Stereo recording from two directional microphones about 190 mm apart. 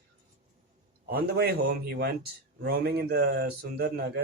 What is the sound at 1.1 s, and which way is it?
A man's voice, 55° right (ahead or behind).